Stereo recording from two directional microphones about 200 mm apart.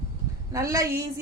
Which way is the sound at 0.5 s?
15° right (ahead or behind).